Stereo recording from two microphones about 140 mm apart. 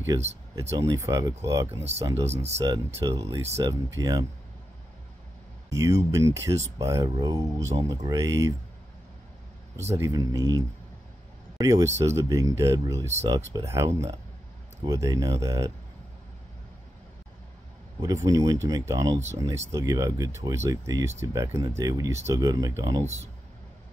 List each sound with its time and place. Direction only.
0.6 s speech: 25° right (ahead or behind)
2.1 s speech: 50° right (ahead or behind)
2.9 s speech: 25° right (ahead or behind)
5.7 s speech: 20° right (ahead or behind)
9.9 s speech: 25° right (ahead or behind)
18.0 s speech: 25° right (ahead or behind)
23.0 s speech: 50° right (ahead or behind)